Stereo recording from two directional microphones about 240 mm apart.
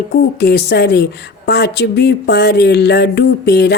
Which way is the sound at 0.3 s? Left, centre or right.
Left.